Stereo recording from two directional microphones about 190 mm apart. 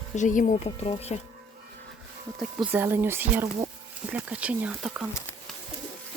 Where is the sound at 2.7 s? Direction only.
10° right (ahead or behind).